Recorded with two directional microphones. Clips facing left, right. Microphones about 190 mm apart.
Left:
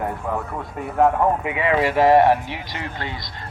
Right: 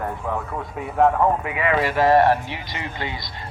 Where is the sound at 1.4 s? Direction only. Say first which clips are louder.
Left 2 dB; 25° left (ahead or behind).